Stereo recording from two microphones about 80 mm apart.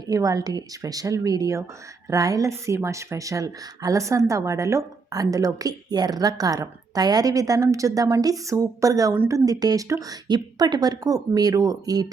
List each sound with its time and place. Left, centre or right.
0.1 s a woman's voice: right